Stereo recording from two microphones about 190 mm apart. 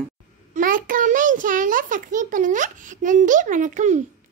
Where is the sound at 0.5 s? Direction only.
45° right (ahead or behind).